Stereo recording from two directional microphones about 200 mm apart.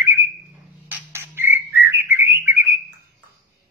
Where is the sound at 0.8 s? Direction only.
10° right (ahead or behind).